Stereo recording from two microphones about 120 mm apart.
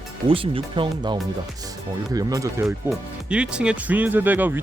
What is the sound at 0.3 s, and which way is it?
Speech, 50° right (ahead or behind).